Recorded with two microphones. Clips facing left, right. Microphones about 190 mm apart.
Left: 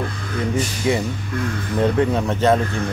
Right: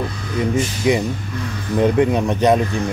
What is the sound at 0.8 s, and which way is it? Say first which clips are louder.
Speech: right 3 dB; 15° right (ahead or behind).